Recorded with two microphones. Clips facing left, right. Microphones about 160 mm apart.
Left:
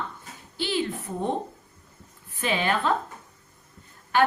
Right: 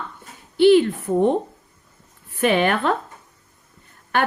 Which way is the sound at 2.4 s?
60° right (ahead or behind).